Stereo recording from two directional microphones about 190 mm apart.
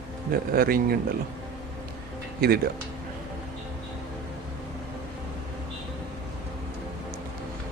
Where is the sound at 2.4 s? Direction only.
55° right (ahead or behind).